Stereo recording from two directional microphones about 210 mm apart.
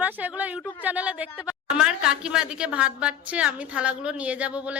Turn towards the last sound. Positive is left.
turn(degrees=-5)  # may be behind; listen again after turning